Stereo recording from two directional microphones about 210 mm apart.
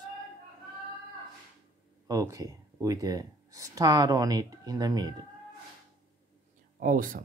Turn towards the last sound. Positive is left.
turn(degrees=-40)  # may be behind; listen again after turning